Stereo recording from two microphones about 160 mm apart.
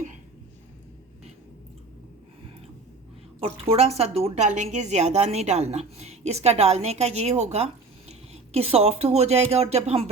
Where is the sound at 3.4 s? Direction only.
40° right (ahead or behind).